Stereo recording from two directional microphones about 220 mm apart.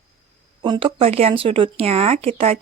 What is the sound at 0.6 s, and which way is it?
Speech, 20° right (ahead or behind).